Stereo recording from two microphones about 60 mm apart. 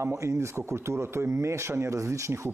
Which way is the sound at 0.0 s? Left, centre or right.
Right.